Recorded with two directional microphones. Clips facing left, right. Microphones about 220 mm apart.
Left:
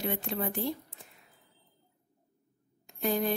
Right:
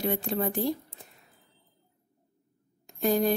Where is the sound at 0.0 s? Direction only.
40° right (ahead or behind).